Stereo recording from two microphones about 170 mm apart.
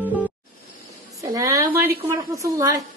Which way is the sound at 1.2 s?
20° right (ahead or behind).